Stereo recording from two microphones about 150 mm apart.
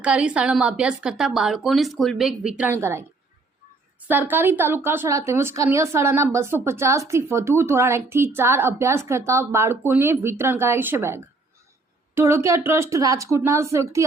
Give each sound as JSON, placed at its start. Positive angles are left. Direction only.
{"t": 0.0, "sound": "speech", "side_deg": -5}
{"t": 2.7, "sound": "a woman's voice", "side_deg": -15}
{"t": 4.1, "sound": "a woman's voice", "side_deg": -10}